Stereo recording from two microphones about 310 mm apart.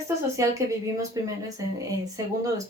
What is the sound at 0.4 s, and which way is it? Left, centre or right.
Speech, centre.